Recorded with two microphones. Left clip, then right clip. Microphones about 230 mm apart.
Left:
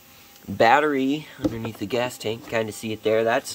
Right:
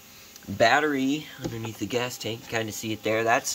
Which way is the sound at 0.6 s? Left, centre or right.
Centre.